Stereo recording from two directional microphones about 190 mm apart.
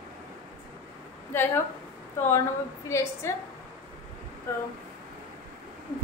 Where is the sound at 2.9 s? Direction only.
15° left (ahead or behind).